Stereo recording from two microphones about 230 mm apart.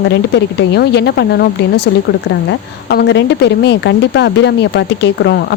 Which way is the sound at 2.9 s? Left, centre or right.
Left.